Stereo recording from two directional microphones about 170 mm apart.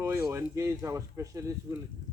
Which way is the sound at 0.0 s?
15° right (ahead or behind).